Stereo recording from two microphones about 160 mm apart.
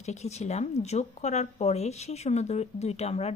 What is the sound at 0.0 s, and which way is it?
Speech, 45° left (ahead or behind).